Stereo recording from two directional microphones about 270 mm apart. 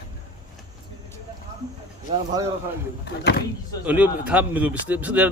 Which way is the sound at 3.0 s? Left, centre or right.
Left.